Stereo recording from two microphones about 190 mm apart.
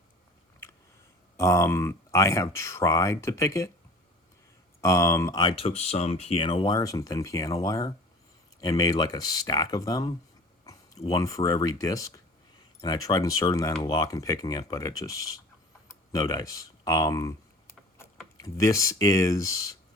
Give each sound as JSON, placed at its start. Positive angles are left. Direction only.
{"t": 1.4, "sound": "speech", "side_deg": 15}
{"t": 4.8, "sound": "speech", "side_deg": 15}
{"t": 11.1, "sound": "speech", "side_deg": 20}
{"t": 18.3, "sound": "speech", "side_deg": 15}